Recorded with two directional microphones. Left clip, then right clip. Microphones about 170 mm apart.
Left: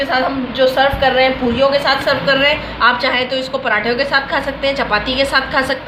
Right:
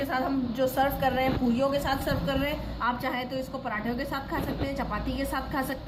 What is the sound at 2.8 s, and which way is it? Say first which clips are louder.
Speech: left 15 dB; 45° left (ahead or behind).